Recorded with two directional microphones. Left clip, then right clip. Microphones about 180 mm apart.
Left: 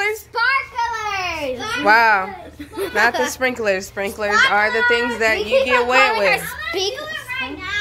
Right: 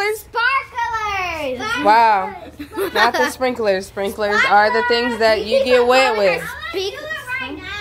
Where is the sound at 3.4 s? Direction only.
10° right (ahead or behind); by 6.3 s 25° right (ahead or behind).